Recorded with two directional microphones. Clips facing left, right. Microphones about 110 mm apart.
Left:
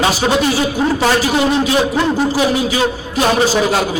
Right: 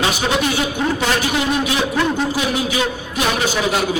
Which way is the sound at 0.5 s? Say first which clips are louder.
Left 4 dB; 35° left (ahead or behind).